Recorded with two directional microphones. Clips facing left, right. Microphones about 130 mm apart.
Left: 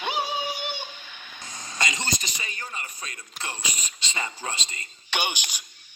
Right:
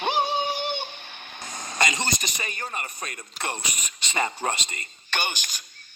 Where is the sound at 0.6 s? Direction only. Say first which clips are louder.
Right 4 dB; 55° right (ahead or behind).